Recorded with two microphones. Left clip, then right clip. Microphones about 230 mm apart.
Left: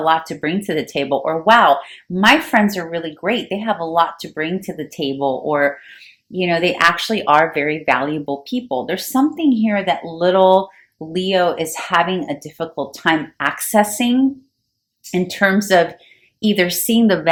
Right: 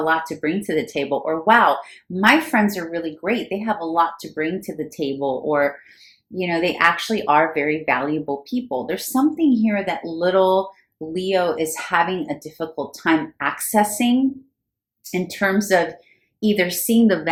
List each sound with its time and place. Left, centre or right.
0.0 s speech: left